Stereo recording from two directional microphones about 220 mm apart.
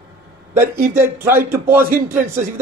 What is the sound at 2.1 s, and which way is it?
Speech, 10° right (ahead or behind).